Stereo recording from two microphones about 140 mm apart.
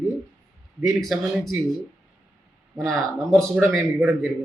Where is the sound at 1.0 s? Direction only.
Centre (ahead or behind).